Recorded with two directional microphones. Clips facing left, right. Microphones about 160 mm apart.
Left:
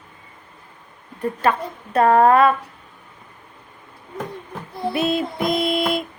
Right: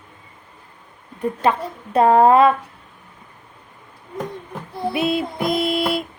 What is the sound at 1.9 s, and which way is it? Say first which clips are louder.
Speech: right 1 dB; 25° right (ahead or behind).